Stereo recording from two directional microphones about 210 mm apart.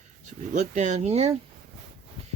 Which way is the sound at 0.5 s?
35° right (ahead or behind).